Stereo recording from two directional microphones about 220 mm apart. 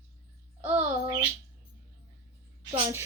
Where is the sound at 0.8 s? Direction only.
25° right (ahead or behind).